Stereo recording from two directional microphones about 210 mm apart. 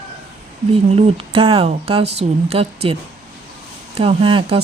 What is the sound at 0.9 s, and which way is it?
Speech, 30° right (ahead or behind).